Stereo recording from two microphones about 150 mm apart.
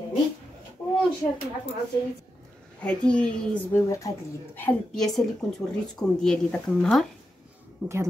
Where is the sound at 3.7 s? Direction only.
20° left (ahead or behind); by 7.1 s centre (ahead or behind).